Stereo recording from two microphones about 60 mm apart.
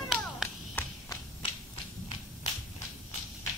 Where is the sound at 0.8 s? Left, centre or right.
Left.